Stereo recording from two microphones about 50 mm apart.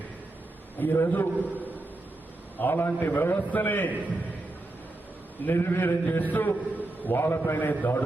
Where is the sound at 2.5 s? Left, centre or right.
Left.